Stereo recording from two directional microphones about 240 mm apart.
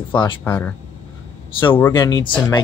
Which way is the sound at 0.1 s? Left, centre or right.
Centre.